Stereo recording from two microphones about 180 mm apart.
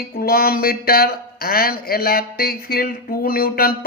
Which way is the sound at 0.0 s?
55° left (ahead or behind).